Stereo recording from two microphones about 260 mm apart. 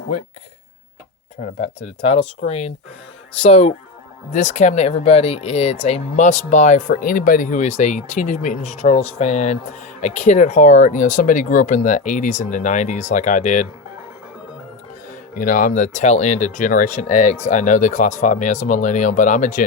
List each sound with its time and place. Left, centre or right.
1.6 s speech: left
15.4 s speech: left